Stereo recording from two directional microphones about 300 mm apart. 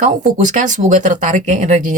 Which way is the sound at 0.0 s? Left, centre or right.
Right.